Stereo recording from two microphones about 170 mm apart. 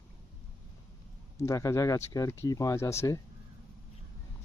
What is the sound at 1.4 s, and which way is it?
Speech, 20° left (ahead or behind).